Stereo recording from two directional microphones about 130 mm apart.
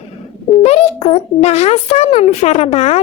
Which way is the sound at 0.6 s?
55° left (ahead or behind).